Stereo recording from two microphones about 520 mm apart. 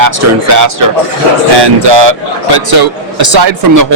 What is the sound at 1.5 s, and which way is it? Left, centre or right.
Speech, right.